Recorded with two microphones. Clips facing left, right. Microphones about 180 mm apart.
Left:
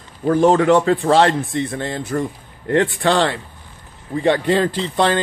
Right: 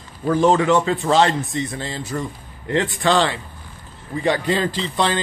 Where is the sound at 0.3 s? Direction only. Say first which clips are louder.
Left 3 dB; 55° left (ahead or behind).